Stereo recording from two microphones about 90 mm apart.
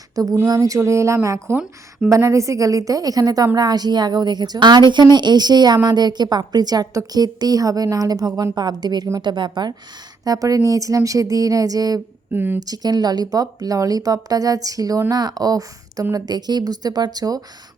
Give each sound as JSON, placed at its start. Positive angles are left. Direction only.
{"t": 0.4, "sound": "a woman's voice", "side_deg": -40}
{"t": 10.2, "sound": "speech", "side_deg": -40}
{"t": 12.3, "sound": "speech", "side_deg": -25}
{"t": 12.6, "sound": "a woman's voice", "side_deg": -45}